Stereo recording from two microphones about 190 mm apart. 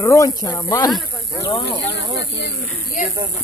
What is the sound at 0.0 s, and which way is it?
Speech, 15° left (ahead or behind).